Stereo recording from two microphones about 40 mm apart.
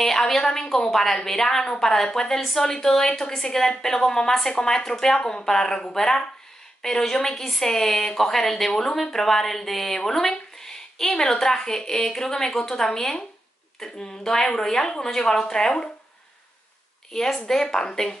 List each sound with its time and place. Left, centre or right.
0.3 s a woman's voice: centre
17.1 s a woman's voice: centre